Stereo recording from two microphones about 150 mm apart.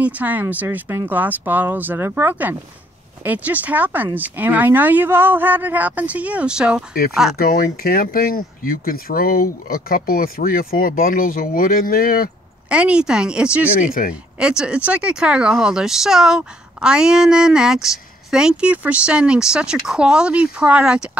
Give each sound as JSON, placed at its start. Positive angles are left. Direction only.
{"t": 0.0, "sound": "speech", "side_deg": -10}
{"t": 7.3, "sound": "speech", "side_deg": 80}
{"t": 12.6, "sound": "speech", "side_deg": -5}